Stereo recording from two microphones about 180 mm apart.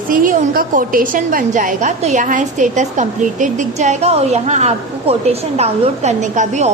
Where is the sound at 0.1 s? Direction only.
50° right (ahead or behind).